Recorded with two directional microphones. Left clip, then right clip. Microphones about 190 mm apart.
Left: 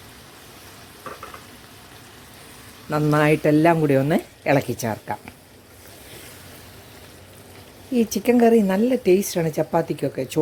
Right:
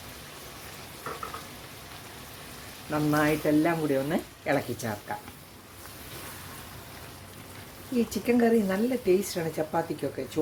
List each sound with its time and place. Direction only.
2.9 s speech: 55° left (ahead or behind)
8.1 s speech: 50° left (ahead or behind)